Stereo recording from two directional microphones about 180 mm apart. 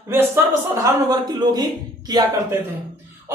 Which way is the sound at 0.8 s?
20° right (ahead or behind).